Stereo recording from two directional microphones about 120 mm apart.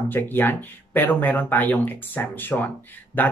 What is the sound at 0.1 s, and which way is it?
Speech, 15° left (ahead or behind).